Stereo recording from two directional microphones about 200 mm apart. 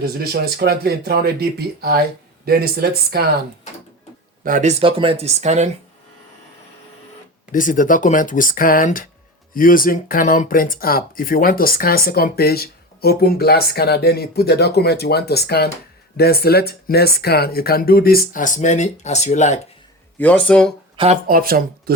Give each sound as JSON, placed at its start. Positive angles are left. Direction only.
{"t": 0.0, "sound": "speech", "side_deg": -50}
{"t": 4.4, "sound": "speech", "side_deg": -40}
{"t": 4.8, "sound": "speech", "side_deg": -25}
{"t": 7.5, "sound": "speech", "side_deg": 40}
{"t": 20.1, "sound": "speech", "side_deg": 5}
{"t": 20.9, "sound": "speech", "side_deg": -30}
{"t": 21.2, "sound": "speech", "side_deg": -45}